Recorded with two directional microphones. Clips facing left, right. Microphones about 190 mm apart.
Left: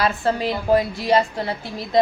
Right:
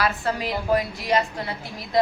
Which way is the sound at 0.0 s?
30° left (ahead or behind).